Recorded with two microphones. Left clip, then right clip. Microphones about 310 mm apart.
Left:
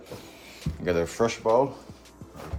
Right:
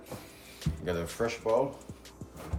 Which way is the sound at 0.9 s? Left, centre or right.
Left.